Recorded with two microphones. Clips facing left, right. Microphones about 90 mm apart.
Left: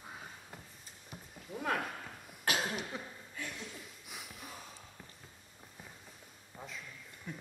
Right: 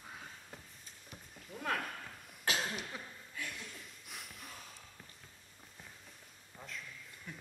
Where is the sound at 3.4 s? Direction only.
5° left (ahead or behind).